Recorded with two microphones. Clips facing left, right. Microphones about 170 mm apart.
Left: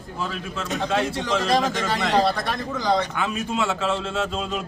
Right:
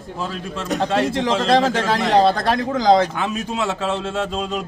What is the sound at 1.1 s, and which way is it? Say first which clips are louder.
Speech: right 5 dB; 90° right.